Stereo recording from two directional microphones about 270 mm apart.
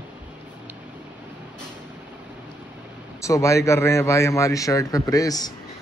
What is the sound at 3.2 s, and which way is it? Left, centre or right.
A man's voice, centre.